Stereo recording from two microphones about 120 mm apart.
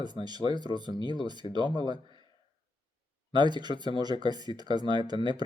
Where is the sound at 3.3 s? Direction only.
40° right (ahead or behind).